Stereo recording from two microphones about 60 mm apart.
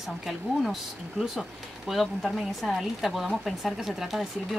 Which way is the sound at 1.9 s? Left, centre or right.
Centre.